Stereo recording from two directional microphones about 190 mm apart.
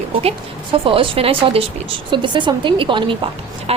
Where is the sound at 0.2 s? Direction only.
30° right (ahead or behind).